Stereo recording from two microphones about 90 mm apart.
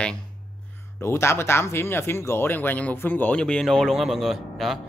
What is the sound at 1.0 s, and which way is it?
Speech, 30° left (ahead or behind).